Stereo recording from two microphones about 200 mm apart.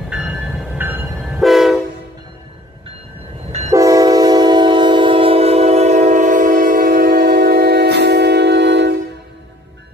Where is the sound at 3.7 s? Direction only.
15° right (ahead or behind); by 8.9 s 60° right (ahead or behind).